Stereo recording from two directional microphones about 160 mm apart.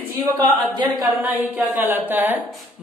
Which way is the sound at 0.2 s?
25° right (ahead or behind).